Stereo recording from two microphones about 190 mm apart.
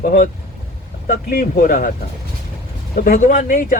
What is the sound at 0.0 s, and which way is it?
Speech, 50° left (ahead or behind).